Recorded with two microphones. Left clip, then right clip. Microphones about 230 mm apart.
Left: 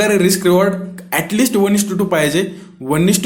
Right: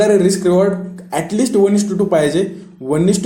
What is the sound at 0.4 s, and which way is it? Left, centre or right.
Speech, left.